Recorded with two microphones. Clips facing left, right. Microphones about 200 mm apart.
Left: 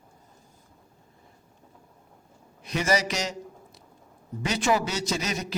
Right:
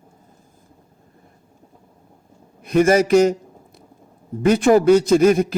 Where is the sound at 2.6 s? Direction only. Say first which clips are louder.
Right 11 dB; 55° right (ahead or behind).